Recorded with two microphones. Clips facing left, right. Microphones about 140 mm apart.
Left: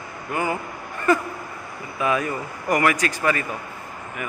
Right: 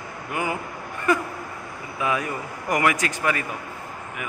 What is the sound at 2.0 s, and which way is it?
Speech, 15° right (ahead or behind).